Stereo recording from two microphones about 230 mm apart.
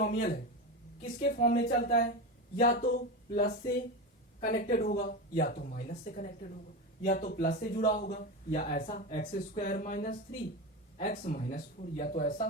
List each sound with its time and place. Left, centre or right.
0.0 s a man's voice: left